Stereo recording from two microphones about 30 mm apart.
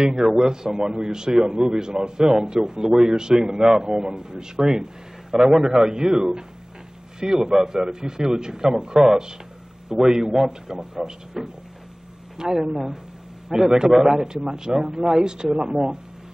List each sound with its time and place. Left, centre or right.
0.0 s a man's voice: centre
1.3 s speech: centre
1.6 s a man's voice: right
12.7 s a man's voice: centre